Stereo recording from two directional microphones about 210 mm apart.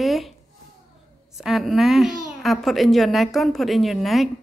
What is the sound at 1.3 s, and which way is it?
A woman's voice, centre (ahead or behind).